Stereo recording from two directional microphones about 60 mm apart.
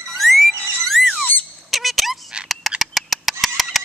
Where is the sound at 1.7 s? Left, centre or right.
Centre.